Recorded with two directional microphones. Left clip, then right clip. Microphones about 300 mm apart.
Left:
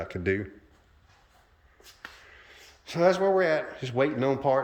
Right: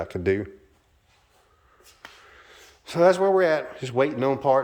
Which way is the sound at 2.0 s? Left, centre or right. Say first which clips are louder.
Even; centre.